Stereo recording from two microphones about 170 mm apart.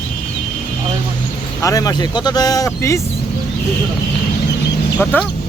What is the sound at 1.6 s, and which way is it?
Speech, 20° left (ahead or behind).